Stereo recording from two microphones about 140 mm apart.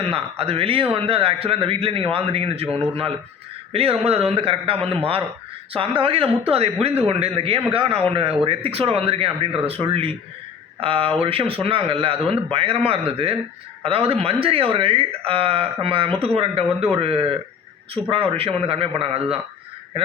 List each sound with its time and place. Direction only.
0.1 s speech: 45° right (ahead or behind)
13.8 s speech: 45° right (ahead or behind)